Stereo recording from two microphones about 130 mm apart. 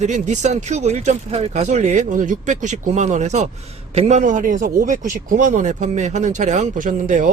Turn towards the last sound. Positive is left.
turn(degrees=-80)